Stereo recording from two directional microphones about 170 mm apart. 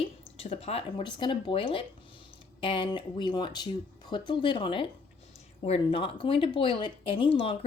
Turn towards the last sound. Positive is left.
turn(degrees=30)  # may be behind; listen again after turning